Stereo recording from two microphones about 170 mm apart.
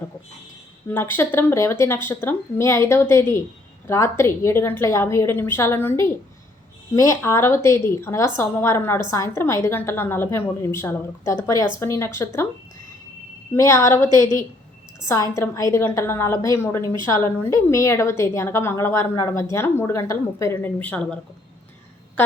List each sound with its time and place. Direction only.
0.9 s speech: 10° left (ahead or behind)
13.5 s speech: 15° left (ahead or behind)
14.1 s a woman's voice: 25° right (ahead or behind)
15.0 s a woman's voice: 20° left (ahead or behind)